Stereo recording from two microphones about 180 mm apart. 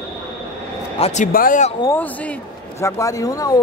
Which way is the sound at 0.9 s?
35° left (ahead or behind).